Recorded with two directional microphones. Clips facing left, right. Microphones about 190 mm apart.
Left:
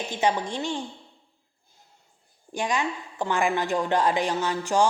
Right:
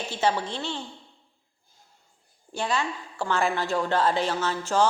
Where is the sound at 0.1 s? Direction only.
15° left (ahead or behind).